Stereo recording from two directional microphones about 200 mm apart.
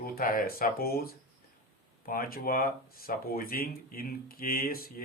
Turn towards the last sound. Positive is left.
turn(degrees=45)  # may be behind; listen again after turning